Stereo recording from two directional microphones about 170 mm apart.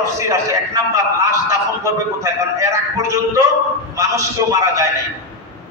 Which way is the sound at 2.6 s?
20° right (ahead or behind).